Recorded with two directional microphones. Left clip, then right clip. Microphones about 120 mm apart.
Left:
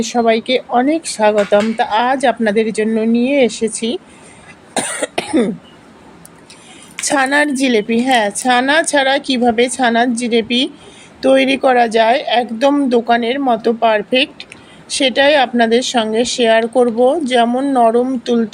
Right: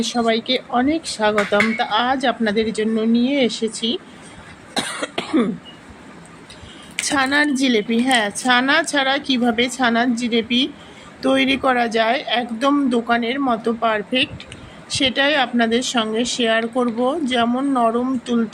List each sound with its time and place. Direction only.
0.0 s speech: 45° left (ahead or behind)
4.7 s cough: 45° left (ahead or behind)
7.0 s speech: 45° left (ahead or behind)